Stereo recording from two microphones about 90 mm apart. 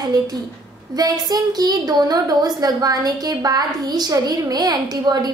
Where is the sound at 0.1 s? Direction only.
45° right (ahead or behind).